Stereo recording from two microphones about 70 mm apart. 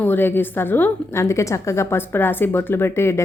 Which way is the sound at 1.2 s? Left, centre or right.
Left.